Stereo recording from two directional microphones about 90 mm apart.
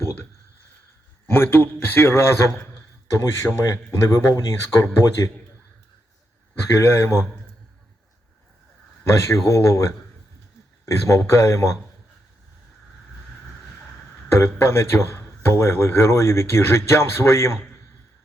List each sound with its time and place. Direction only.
1.3 s a man's voice: 25° left (ahead or behind); by 5.3 s 40° left (ahead or behind)
6.7 s a man's voice: 30° left (ahead or behind)
9.2 s speech: 30° left (ahead or behind)
11.0 s speech: 35° left (ahead or behind)
14.3 s a man's voice: 30° left (ahead or behind)